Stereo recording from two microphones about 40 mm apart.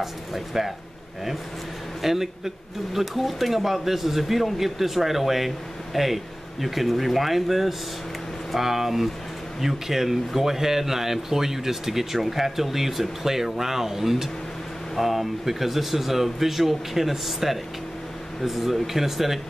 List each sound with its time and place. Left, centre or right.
0.0 s speech: centre
2.0 s speech: centre